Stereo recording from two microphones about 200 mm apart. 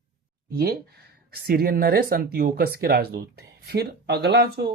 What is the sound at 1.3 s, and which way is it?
Speech, 50° right (ahead or behind).